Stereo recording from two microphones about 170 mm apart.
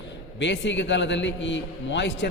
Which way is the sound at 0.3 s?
90° left.